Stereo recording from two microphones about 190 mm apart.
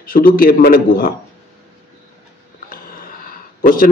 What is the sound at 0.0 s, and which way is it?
A man's voice, 50° left (ahead or behind).